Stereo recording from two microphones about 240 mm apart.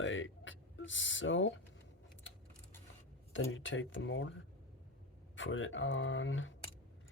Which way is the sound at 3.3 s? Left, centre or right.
Left.